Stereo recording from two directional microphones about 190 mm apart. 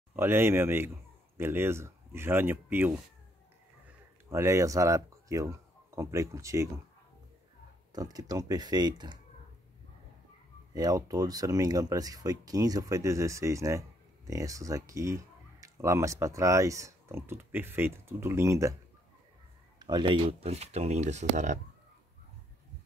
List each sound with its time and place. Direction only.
0.1 s speech: 10° right (ahead or behind)
4.3 s speech: 15° right (ahead or behind)
7.9 s speech: 20° right (ahead or behind)
10.7 s speech: 20° right (ahead or behind)
19.8 s speech: 25° right (ahead or behind)